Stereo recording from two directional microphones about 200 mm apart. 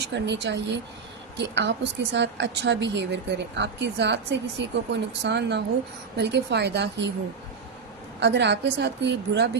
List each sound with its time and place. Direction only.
0.0 s a woman's voice: 60° right (ahead or behind)
8.2 s a woman's voice: 60° right (ahead or behind)